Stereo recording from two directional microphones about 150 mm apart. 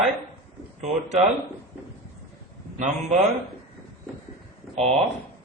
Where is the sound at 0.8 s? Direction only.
50° right (ahead or behind).